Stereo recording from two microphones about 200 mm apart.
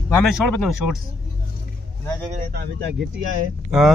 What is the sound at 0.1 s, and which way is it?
Speech, 5° left (ahead or behind).